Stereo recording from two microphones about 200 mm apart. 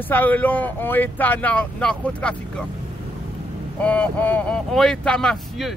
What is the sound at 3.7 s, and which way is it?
Speech, 5° left (ahead or behind).